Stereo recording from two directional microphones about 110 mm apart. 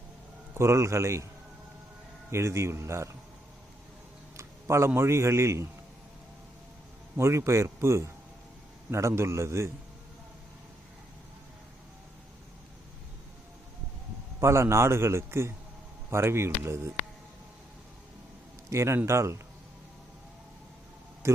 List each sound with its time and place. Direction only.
0.5 s a man's voice: 25° right (ahead or behind)
2.3 s a man's voice: 25° right (ahead or behind)
4.4 s a sound: 25° right (ahead or behind)
4.9 s a man's voice: 25° right (ahead or behind)
7.2 s a man's voice: 25° right (ahead or behind)
14.4 s a man's voice: 25° right (ahead or behind)
18.7 s a man's voice: 25° right (ahead or behind)
21.2 s a sound: 25° right (ahead or behind)